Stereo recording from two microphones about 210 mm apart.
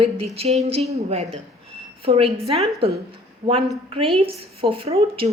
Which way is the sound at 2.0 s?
30° right (ahead or behind).